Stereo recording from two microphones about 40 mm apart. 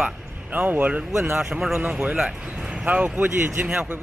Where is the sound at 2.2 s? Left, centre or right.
Right.